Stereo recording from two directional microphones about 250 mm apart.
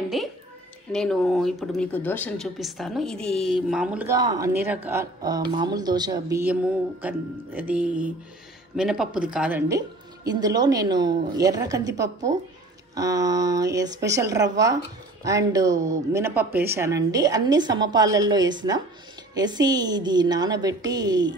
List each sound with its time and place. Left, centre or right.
0.1 s a child's voice: centre